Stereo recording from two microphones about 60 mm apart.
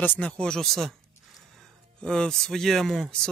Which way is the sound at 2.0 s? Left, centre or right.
Centre.